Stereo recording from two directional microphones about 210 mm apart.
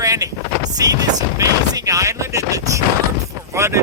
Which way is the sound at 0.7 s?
15° right (ahead or behind).